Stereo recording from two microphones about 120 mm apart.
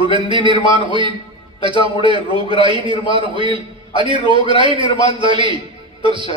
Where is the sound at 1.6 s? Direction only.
45° right (ahead or behind).